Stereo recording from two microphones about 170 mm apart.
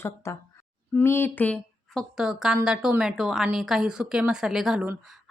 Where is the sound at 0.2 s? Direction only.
15° left (ahead or behind).